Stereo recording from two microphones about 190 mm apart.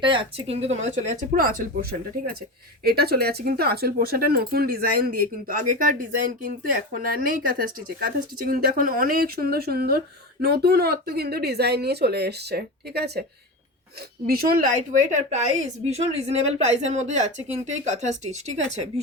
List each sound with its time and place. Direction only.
0.0 s a woman's voice: 25° right (ahead or behind)
1.0 s speech: 45° right (ahead or behind)
14.3 s a woman's voice: 50° right (ahead or behind); by 18.8 s 35° right (ahead or behind)